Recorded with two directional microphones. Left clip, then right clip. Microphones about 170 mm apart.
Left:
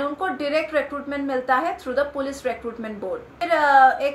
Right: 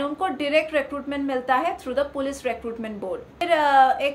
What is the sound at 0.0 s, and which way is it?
A woman's voice, 15° right (ahead or behind).